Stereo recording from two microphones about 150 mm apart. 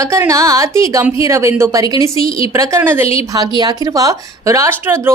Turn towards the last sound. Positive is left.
turn(degrees=-15)  # may be behind; listen again after turning